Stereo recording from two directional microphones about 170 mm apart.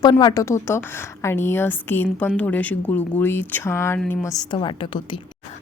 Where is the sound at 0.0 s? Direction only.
25° left (ahead or behind).